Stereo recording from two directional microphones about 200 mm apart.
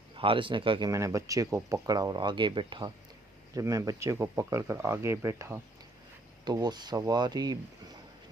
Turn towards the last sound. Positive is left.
turn(degrees=-20)  # may be behind; listen again after turning